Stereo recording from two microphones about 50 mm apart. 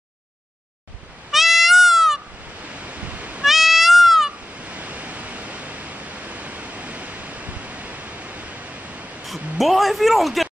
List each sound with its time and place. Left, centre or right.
1.3 s goat: centre
2.6 s waves: right
3.4 s cat: centre
4.3 s a sound: right
9.6 s speech: centre